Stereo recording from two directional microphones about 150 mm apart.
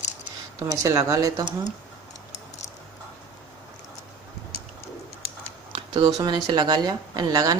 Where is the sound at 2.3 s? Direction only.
50° left (ahead or behind).